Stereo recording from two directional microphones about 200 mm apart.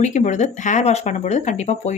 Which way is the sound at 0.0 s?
35° left (ahead or behind).